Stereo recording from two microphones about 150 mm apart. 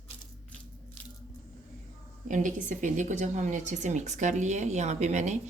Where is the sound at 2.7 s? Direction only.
55° right (ahead or behind).